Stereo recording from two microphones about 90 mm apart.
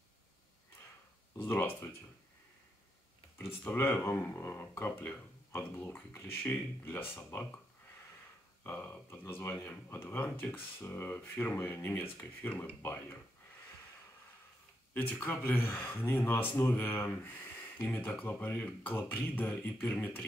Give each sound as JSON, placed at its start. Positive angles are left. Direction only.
{"t": 1.4, "sound": "speech", "side_deg": 25}
{"t": 3.3, "sound": "speech", "side_deg": 25}
{"t": 8.6, "sound": "speech", "side_deg": 25}
{"t": 15.0, "sound": "speech", "side_deg": 20}